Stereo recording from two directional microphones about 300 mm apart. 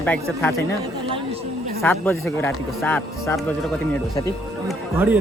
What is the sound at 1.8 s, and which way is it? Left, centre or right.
Speech, centre.